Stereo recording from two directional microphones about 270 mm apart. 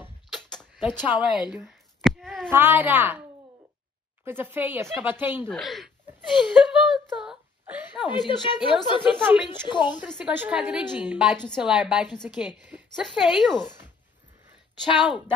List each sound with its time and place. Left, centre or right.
0.0 s a sound: centre
4.2 s speech: centre
6.3 s whimper: centre
8.1 s speech: centre
9.9 s a woman's voice: centre
14.8 s speech: centre
15.0 s a woman's voice: centre